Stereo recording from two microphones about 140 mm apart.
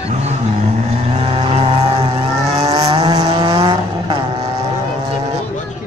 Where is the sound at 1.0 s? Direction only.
45° right (ahead or behind).